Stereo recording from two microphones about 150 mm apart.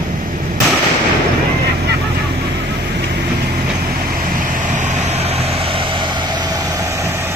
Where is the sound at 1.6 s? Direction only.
90° right.